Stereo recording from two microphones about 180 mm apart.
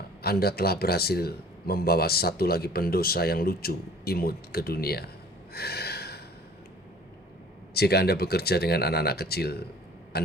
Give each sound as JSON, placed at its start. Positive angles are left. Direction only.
{"t": 0.2, "sound": "a man's voice", "side_deg": 60}
{"t": 5.5, "sound": "a sound", "side_deg": 60}
{"t": 7.7, "sound": "a man's voice", "side_deg": 60}